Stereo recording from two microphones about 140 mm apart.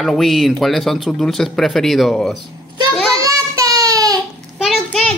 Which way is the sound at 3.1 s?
25° right (ahead or behind).